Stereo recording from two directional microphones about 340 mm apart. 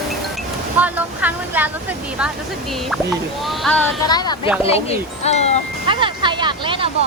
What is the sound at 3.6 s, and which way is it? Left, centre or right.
Speech, centre.